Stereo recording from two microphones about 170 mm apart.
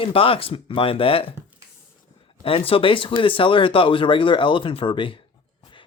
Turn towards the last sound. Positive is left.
turn(degrees=30)  # may be behind; listen again after turning